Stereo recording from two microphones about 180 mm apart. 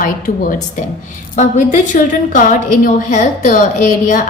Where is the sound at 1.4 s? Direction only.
45° left (ahead or behind).